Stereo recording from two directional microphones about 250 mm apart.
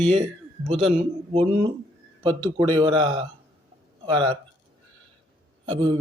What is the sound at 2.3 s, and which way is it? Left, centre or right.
Speech, centre.